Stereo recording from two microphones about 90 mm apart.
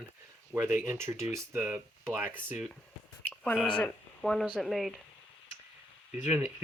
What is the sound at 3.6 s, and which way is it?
Speech, 5° left (ahead or behind).